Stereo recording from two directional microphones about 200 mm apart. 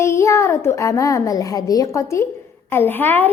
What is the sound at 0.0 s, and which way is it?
A child's voice, 15° left (ahead or behind).